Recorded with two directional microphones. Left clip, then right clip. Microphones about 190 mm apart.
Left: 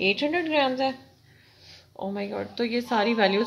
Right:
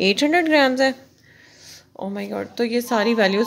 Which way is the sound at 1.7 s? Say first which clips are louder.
Right 3 dB; 30° right (ahead or behind).